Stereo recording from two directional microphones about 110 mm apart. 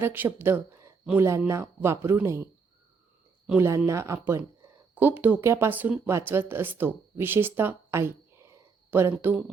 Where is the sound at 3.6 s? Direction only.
25° right (ahead or behind).